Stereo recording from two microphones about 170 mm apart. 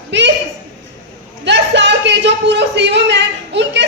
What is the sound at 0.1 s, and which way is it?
Speech, 90° right.